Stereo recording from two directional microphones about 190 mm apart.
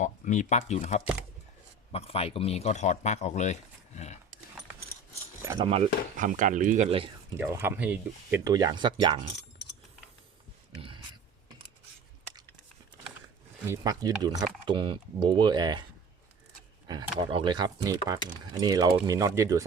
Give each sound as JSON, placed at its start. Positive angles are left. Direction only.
{"t": 0.0, "sound": "speech", "side_deg": 40}
{"t": 5.5, "sound": "speech", "side_deg": -30}
{"t": 6.1, "sound": "speech", "side_deg": -45}
{"t": 7.3, "sound": "speech", "side_deg": -10}
{"t": 8.4, "sound": "speech", "side_deg": -20}
{"t": 10.8, "sound": "a sound", "side_deg": -25}
{"t": 13.7, "sound": "speech", "side_deg": -20}
{"t": 16.9, "sound": "speech", "side_deg": -25}